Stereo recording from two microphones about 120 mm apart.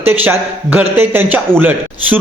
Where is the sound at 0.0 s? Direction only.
15° right (ahead or behind).